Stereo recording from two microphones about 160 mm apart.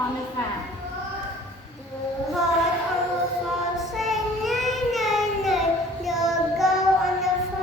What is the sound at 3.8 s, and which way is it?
Child singing, centre (ahead or behind).